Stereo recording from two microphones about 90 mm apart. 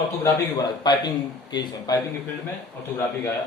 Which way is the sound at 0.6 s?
50° left (ahead or behind).